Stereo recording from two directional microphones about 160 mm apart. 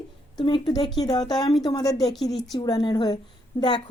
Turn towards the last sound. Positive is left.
turn(degrees=30)  # may be behind; listen again after turning